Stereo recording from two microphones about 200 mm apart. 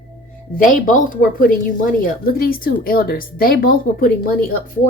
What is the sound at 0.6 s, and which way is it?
Speech, 40° left (ahead or behind).